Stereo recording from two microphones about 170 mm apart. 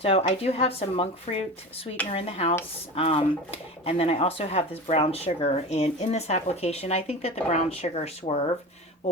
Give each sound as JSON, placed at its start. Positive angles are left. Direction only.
{"t": 0.0, "sound": "speech", "side_deg": 35}